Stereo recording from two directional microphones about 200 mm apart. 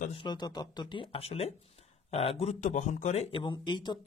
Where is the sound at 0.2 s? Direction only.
20° left (ahead or behind).